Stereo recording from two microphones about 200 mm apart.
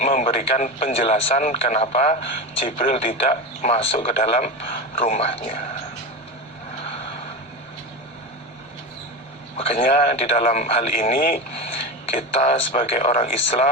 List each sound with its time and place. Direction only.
0.0 s a man's voice: 35° left (ahead or behind)
9.6 s a man's voice: 35° left (ahead or behind)